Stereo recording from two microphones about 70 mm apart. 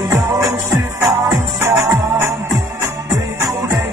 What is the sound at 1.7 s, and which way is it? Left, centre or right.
Music, right.